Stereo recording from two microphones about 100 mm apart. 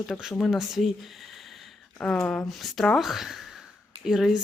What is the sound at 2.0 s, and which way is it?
Speech, 10° left (ahead or behind).